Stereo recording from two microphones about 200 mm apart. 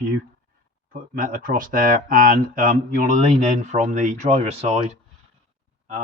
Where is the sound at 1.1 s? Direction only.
40° right (ahead or behind).